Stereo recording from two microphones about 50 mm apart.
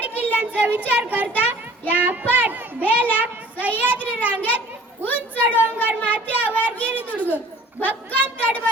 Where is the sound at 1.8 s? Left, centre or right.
Left.